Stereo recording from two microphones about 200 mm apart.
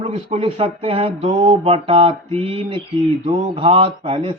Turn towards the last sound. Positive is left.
turn(degrees=-25)  # may be behind; listen again after turning